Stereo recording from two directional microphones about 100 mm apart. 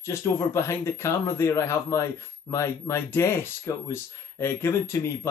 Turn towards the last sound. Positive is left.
turn(degrees=25)  # may be behind; listen again after turning